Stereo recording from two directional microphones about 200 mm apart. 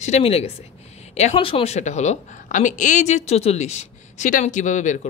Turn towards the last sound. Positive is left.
turn(degrees=40)  # may be behind; listen again after turning